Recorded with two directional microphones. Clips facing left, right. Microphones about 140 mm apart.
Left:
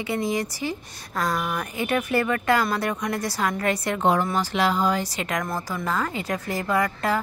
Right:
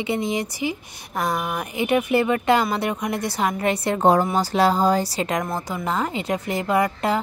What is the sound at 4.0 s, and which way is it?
A woman's voice, 40° right (ahead or behind).